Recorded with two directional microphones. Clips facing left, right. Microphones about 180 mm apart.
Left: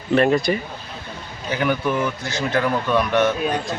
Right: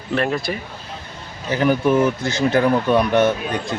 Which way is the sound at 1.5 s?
35° right (ahead or behind).